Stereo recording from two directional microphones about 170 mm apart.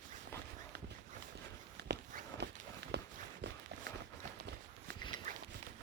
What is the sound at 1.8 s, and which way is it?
Walk, 80° right.